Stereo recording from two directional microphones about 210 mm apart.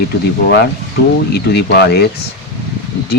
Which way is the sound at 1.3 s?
50° left (ahead or behind).